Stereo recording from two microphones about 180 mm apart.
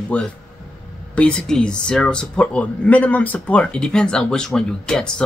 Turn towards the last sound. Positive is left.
turn(degrees=5)  # may be behind; listen again after turning